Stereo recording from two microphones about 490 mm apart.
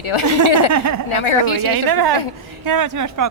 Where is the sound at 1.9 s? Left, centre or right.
Right.